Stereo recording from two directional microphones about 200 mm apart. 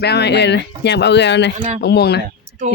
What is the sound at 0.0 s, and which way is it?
Speech, 55° left (ahead or behind).